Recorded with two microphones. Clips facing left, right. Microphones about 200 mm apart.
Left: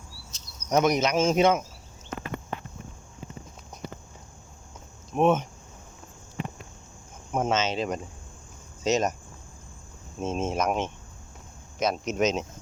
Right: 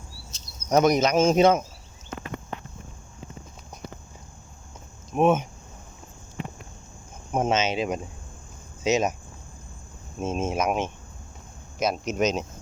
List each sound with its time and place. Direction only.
0.3 s speech: 35° right (ahead or behind)
5.1 s speech: 5° right (ahead or behind)
7.3 s speech: 15° right (ahead or behind)
10.2 s speech: 5° right (ahead or behind)